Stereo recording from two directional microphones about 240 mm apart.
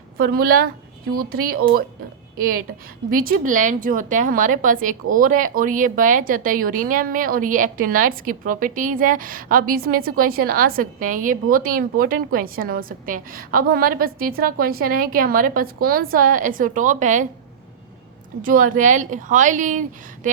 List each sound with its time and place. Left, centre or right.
0.3 s a woman's voice: right
3.1 s a woman's voice: right
18.4 s a woman's voice: right